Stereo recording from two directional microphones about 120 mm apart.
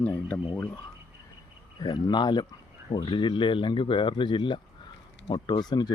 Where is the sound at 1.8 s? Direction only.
35° left (ahead or behind).